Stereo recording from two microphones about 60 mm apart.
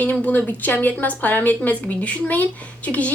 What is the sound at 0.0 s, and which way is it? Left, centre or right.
A woman's voice, left.